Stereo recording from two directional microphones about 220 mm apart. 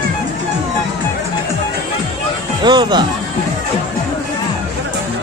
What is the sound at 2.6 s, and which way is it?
Speech, 20° right (ahead or behind).